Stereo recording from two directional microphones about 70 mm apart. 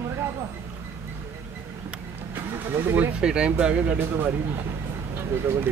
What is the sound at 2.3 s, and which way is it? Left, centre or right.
Vehicle, right.